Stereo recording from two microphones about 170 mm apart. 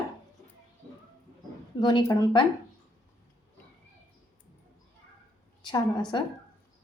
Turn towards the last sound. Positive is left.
turn(degrees=25)  # may be behind; listen again after turning